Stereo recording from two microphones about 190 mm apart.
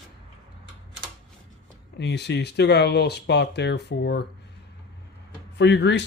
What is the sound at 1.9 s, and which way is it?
Speech, 60° left (ahead or behind).